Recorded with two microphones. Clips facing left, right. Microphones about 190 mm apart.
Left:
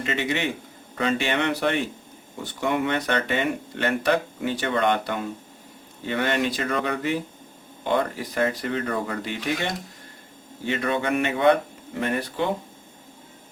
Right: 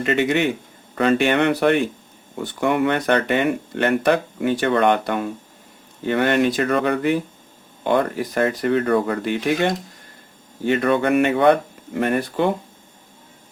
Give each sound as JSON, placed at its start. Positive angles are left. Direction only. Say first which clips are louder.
{"t": 0.0, "sound": "speech", "louder": "right 7 dB", "side_deg": -55}